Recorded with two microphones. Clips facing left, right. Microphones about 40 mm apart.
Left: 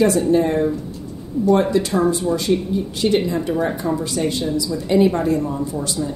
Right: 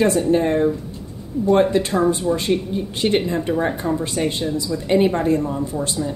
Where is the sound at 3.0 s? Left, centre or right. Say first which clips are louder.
Left 1 dB; right.